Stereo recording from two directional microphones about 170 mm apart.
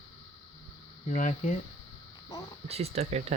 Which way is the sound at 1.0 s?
45° left (ahead or behind).